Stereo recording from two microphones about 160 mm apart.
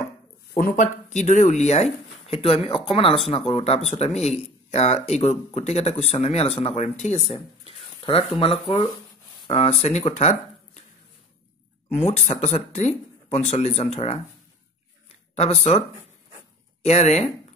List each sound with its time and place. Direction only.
0.6 s speech: 60° left (ahead or behind)
11.9 s speech: 40° left (ahead or behind)
15.3 s speech: 40° left (ahead or behind)
16.8 s speech: 45° left (ahead or behind)